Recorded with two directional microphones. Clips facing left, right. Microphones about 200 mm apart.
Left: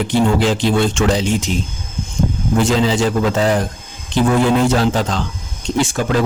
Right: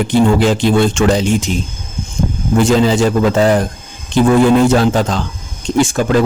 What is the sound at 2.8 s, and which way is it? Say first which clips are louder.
Speech: right 4 dB; 50° right (ahead or behind).